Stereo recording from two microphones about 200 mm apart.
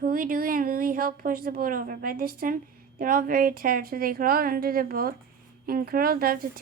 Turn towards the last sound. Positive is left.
turn(degrees=-50)  # may be behind; listen again after turning